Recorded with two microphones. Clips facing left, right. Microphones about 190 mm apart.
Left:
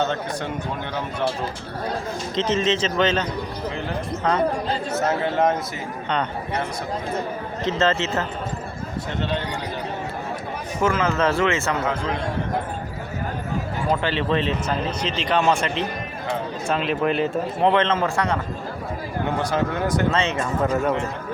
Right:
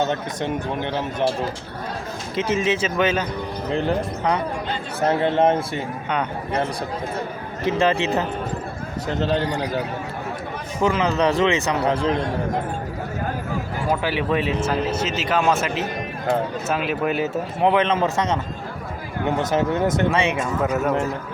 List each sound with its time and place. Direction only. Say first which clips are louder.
0.0 s speech: right 1 dB; 20° right (ahead or behind)
2.3 s speech: even; 10° right (ahead or behind)
4.9 s a man's voice: right 4 dB; 30° right (ahead or behind)
7.6 s speech: right 2 dB; 15° right (ahead or behind)
9.2 s a man's voice: right 6 dB; 40° right (ahead or behind)
10.8 s speech: right 1 dB; 15° right (ahead or behind)
11.8 s a man's voice: right 4 dB; 35° right (ahead or behind)
13.9 s speech: even; 10° right (ahead or behind)
19.4 s a man's voice: right 4 dB; 20° right (ahead or behind); by 20.9 s 5° right (ahead or behind)